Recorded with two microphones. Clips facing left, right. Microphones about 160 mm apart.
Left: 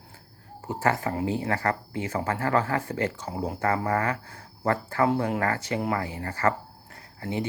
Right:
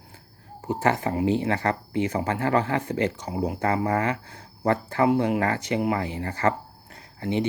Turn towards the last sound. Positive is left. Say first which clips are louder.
# right 5 dB
turn(degrees=-20)  # may be behind; listen again after turning